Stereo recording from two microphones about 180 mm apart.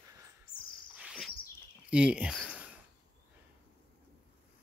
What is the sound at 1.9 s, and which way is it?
Speech, 5° right (ahead or behind).